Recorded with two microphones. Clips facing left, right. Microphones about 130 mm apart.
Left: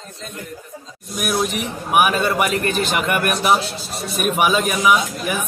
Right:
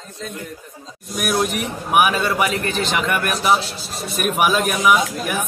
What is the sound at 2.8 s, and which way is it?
Speech, 5° left (ahead or behind).